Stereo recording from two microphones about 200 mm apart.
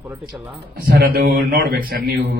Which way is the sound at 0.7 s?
50° right (ahead or behind).